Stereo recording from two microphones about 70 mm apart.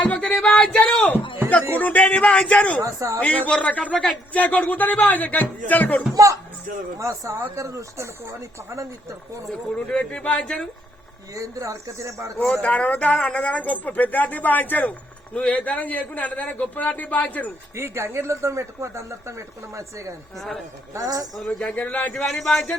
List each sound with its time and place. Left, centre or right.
0.0 s a man's voice: centre
2.8 s speech: right
3.2 s a man's voice: centre
7.0 s speech: right
9.7 s speech: centre
11.3 s speech: right
12.6 s a man's voice: left
17.7 s a woman's voice: right
21.3 s speech: centre
21.8 s a man's voice: left
22.1 s speech: centre